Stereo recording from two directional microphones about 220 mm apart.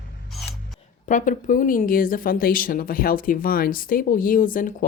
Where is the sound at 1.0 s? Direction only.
35° left (ahead or behind).